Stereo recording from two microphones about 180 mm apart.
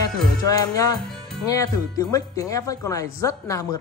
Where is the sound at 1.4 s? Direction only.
20° left (ahead or behind).